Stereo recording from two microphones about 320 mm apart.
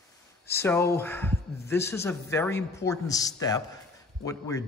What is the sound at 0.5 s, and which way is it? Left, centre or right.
A man's voice, centre.